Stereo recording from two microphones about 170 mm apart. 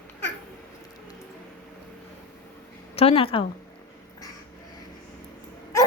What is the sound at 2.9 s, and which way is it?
Speech, 35° left (ahead or behind).